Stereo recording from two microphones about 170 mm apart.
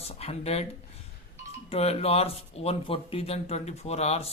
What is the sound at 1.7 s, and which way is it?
Speech, 35° left (ahead or behind).